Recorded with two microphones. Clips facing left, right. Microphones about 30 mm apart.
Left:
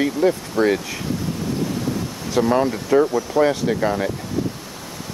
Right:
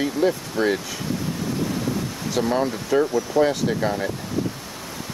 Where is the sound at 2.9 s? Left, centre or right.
Left.